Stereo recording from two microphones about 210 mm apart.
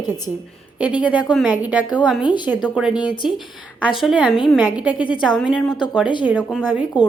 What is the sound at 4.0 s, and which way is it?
Speech, centre (ahead or behind).